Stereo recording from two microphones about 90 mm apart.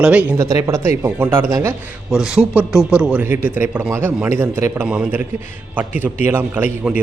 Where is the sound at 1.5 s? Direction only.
40° right (ahead or behind).